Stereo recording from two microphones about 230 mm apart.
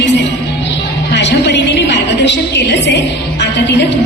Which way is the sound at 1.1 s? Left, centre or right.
Left.